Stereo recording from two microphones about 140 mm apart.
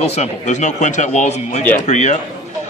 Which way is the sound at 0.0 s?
50° left (ahead or behind).